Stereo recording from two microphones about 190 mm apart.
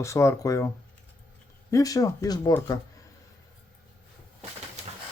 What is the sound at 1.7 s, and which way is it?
Speech, 15° left (ahead or behind).